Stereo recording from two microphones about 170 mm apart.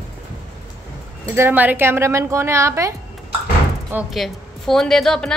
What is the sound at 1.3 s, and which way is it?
Speech, 10° right (ahead or behind).